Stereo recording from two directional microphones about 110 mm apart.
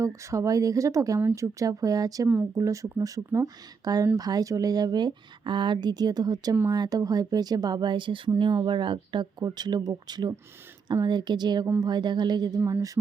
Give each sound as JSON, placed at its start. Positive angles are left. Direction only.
{"t": 0.0, "sound": "speech", "side_deg": -30}